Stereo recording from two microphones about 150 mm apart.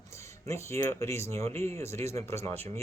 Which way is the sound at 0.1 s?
20° left (ahead or behind).